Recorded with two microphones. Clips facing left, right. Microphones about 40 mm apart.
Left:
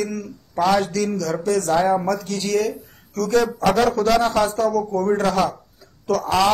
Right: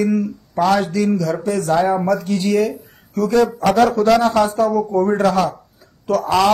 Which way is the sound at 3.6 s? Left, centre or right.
Centre.